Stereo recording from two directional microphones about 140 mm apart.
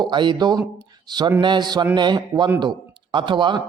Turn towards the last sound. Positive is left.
turn(degrees=-35)  # may be behind; listen again after turning